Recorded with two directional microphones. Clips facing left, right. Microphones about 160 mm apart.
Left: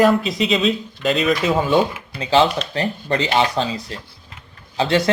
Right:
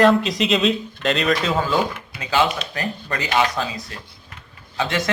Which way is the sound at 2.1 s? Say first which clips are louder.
Left 5 dB; 30° left (ahead or behind).